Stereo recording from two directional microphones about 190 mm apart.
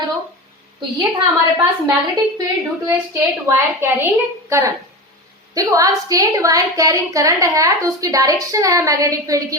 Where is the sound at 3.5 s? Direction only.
10° right (ahead or behind).